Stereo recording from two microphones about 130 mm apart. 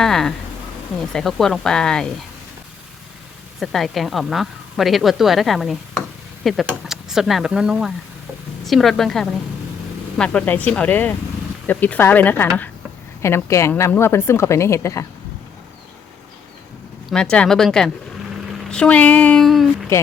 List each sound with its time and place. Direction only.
0.0 s a woman's voice: 5° left (ahead or behind)
3.6 s a woman's voice: centre (ahead or behind); by 15.0 s 20° left (ahead or behind)
17.1 s a woman's voice: 5° left (ahead or behind)